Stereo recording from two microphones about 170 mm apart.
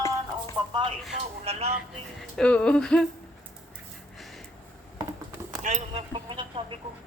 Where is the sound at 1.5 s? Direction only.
35° right (ahead or behind).